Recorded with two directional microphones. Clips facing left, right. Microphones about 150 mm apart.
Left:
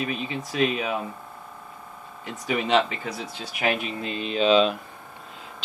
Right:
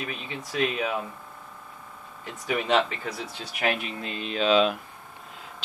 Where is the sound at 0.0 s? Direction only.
5° left (ahead or behind).